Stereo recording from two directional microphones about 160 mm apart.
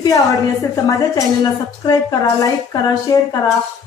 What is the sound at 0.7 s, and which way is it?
Speech, 20° left (ahead or behind).